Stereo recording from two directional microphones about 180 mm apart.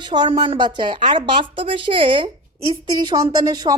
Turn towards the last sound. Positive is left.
turn(degrees=-20)  # may be behind; listen again after turning